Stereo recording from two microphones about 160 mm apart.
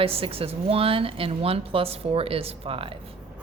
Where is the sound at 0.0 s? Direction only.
35° right (ahead or behind).